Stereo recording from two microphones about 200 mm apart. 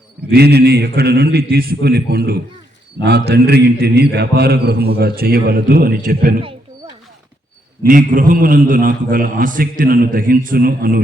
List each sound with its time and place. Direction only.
0.3 s a man's voice: 55° right (ahead or behind)
7.9 s a man's voice: 40° right (ahead or behind)